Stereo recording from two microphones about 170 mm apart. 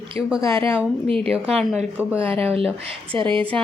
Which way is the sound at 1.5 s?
5° right (ahead or behind).